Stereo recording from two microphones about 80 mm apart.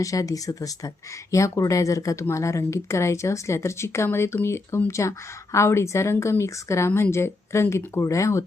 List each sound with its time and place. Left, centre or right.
0.0 s speech: left